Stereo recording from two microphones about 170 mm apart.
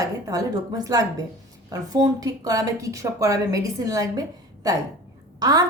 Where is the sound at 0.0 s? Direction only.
20° right (ahead or behind).